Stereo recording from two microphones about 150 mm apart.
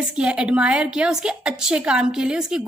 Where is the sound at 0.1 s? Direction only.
5° right (ahead or behind).